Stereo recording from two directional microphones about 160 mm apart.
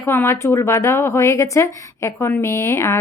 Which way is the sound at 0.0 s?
15° left (ahead or behind).